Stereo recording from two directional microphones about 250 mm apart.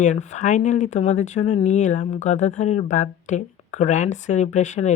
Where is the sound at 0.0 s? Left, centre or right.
Left.